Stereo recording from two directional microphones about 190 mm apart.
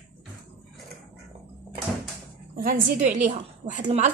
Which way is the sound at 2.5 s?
50° right (ahead or behind).